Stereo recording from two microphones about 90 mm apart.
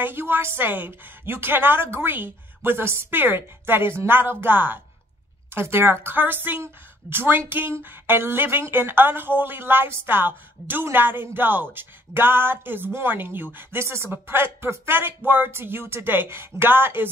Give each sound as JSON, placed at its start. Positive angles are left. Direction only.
{"t": 0.0, "sound": "speech", "side_deg": -25}